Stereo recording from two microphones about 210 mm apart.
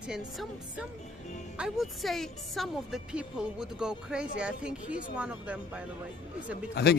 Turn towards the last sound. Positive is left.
turn(degrees=50)  # may be behind; listen again after turning